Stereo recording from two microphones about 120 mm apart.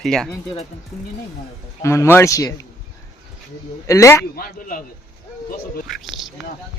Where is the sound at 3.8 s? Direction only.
25° left (ahead or behind).